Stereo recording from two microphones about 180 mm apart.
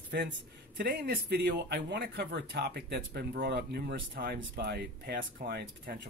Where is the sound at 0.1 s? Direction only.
65° right (ahead or behind).